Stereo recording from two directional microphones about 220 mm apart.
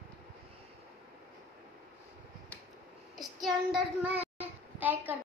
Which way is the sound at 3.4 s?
5° right (ahead or behind).